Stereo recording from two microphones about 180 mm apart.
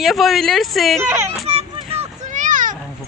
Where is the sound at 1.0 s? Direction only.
15° right (ahead or behind).